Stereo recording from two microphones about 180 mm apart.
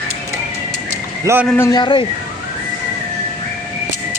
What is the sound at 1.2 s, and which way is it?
Speech, 15° right (ahead or behind).